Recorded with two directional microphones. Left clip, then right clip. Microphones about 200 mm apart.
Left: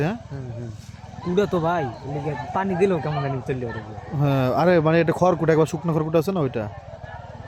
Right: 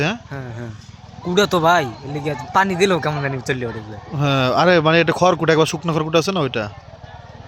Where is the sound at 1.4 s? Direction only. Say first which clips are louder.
Right 7 dB; 15° right (ahead or behind).